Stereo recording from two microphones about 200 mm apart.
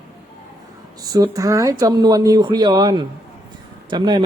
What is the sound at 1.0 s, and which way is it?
Speech, 20° right (ahead or behind).